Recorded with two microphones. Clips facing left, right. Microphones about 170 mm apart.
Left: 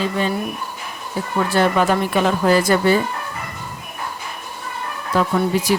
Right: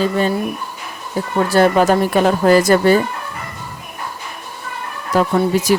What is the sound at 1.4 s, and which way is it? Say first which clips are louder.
Speech: right 4 dB; 40° right (ahead or behind).